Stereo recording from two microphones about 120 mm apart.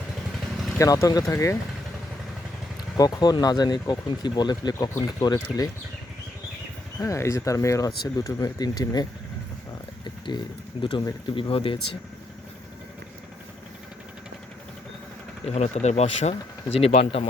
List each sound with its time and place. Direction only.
0.5 s vehicle: centre (ahead or behind)
0.8 s speech: 30° left (ahead or behind)
3.0 s speech: 35° left (ahead or behind)
4.7 s speech: 25° left (ahead or behind)
7.0 s speech: 25° left (ahead or behind)
10.0 s a sound: 40° left (ahead or behind)
11.3 s speech: 50° left (ahead or behind)
15.4 s speech: 70° left (ahead or behind); by 17.2 s 55° left (ahead or behind)